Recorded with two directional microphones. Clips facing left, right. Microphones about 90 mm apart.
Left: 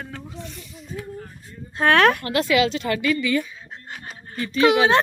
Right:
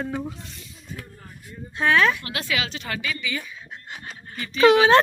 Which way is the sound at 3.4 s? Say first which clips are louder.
Left 1 dB; 30° left (ahead or behind).